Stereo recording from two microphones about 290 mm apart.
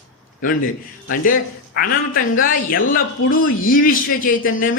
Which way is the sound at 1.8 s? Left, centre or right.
Left.